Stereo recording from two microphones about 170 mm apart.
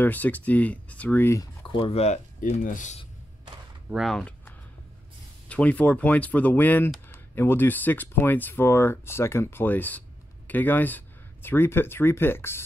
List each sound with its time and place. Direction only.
0.0 s speech: 10° left (ahead or behind)
1.7 s speech: 30° left (ahead or behind); by 3.0 s 50° left (ahead or behind)
3.9 s speech: centre (ahead or behind)
5.5 s speech: 10° left (ahead or behind)